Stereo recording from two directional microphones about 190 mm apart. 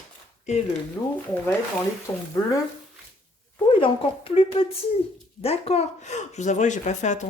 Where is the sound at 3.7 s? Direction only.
25° left (ahead or behind).